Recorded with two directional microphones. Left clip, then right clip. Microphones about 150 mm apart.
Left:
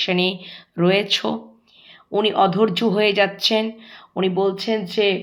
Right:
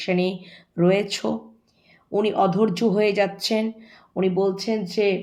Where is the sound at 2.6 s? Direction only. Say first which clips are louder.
Left 2 dB; 25° right (ahead or behind).